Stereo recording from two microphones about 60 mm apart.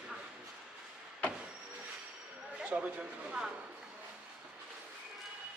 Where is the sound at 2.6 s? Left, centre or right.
Right.